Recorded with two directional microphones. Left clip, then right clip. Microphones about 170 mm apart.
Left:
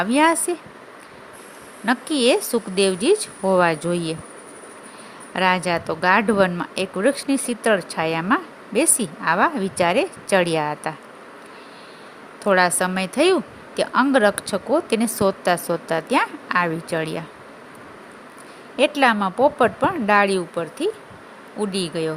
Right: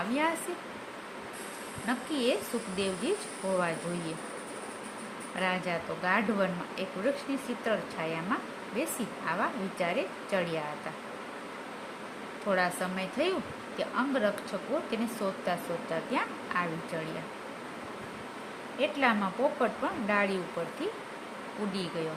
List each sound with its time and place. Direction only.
0.1 s speech: 75° left (ahead or behind)
1.9 s speech: 75° left (ahead or behind)
5.4 s speech: 75° left (ahead or behind)
12.5 s speech: 75° left (ahead or behind)
18.8 s speech: 75° left (ahead or behind)